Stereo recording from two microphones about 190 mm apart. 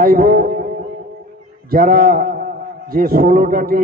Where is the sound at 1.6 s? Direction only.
50° right (ahead or behind).